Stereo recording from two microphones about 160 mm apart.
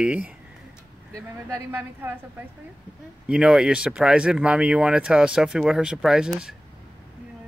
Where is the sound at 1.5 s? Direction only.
15° right (ahead or behind).